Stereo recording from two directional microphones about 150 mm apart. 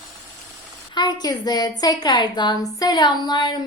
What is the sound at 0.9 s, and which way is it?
A woman's voice, 25° left (ahead or behind).